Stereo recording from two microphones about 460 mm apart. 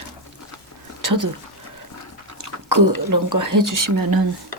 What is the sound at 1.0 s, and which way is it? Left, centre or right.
Speech, right.